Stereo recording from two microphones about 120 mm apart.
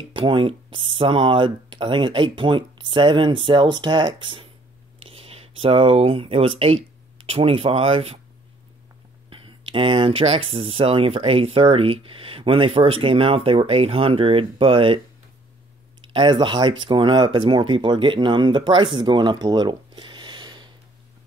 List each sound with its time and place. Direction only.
0.1 s speech: 45° right (ahead or behind)
9.3 s speech: 45° right (ahead or behind)
16.1 s speech: 40° right (ahead or behind)